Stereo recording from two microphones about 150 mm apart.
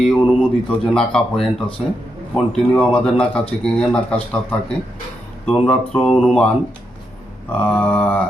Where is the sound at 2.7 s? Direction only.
10° left (ahead or behind).